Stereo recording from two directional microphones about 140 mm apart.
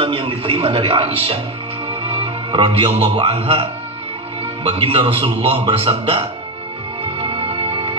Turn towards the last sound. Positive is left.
turn(degrees=-40)  # may be behind; listen again after turning